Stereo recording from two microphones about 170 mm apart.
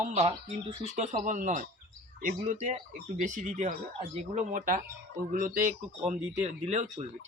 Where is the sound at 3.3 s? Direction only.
50° right (ahead or behind).